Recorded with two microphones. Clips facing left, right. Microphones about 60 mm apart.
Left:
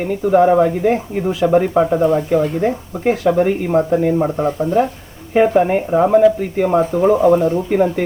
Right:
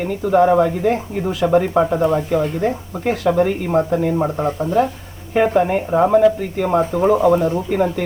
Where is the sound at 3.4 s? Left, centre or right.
Centre.